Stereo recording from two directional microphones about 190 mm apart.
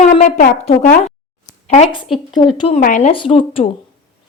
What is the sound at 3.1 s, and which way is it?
Speech, 25° left (ahead or behind).